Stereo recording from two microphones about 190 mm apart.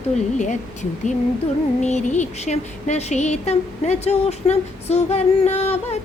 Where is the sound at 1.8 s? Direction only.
35° left (ahead or behind).